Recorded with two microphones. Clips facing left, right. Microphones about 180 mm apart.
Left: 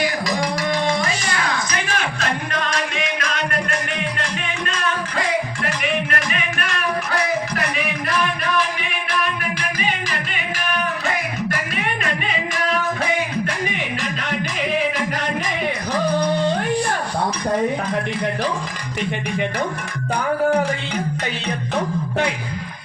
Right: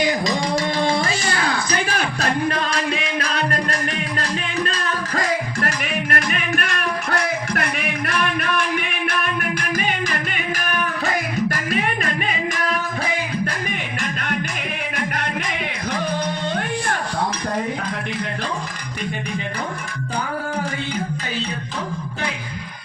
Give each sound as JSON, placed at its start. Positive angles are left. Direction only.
{"t": 0.0, "sound": "music", "side_deg": -20}